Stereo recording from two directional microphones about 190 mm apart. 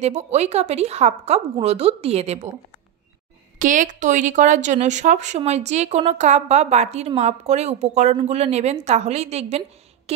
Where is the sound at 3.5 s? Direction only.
40° right (ahead or behind).